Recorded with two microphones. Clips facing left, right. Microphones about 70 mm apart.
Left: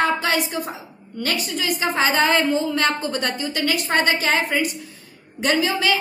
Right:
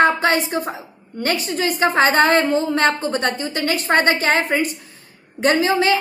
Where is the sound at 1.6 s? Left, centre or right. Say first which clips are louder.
Right 5 dB; right.